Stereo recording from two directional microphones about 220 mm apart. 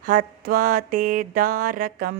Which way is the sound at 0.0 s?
40° right (ahead or behind).